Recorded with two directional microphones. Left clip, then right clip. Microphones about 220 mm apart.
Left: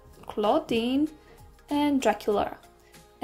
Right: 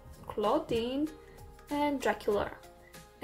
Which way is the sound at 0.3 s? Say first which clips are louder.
Left 5 dB; 25° left (ahead or behind).